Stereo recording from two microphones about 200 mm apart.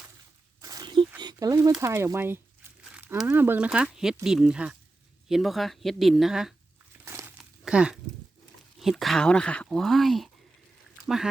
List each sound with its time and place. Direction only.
0.6 s a sound: 20° right (ahead or behind)
1.8 s speech: 15° right (ahead or behind)
7.0 s crumpling: 10° right (ahead or behind)
8.8 s speech: centre (ahead or behind)